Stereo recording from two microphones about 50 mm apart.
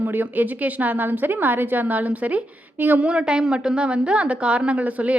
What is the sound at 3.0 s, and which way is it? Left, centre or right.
A woman's voice, centre.